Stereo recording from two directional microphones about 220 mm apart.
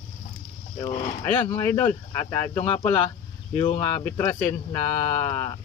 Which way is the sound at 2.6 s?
25° left (ahead or behind).